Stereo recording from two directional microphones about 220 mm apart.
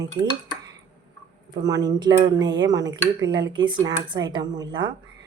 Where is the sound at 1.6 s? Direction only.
15° right (ahead or behind).